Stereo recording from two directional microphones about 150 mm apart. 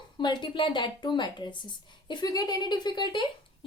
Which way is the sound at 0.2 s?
30° left (ahead or behind).